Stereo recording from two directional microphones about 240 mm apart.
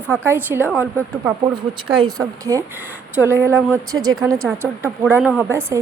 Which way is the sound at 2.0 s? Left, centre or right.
Centre.